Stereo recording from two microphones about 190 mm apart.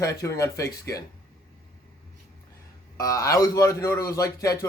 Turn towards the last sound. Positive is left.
turn(degrees=15)  # may be behind; listen again after turning